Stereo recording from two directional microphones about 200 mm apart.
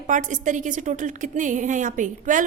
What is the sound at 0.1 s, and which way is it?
A woman's voice, 40° right (ahead or behind).